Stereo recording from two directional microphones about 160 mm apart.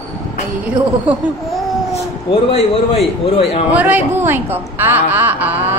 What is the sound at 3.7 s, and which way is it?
A woman's voice, 10° right (ahead or behind).